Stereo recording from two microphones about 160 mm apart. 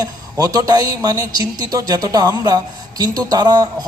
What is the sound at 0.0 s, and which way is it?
Speech, 25° right (ahead or behind).